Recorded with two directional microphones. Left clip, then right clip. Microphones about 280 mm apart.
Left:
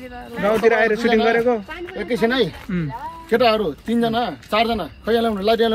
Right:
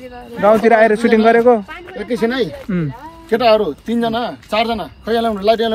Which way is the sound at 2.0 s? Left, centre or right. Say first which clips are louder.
Right 1 dB; left.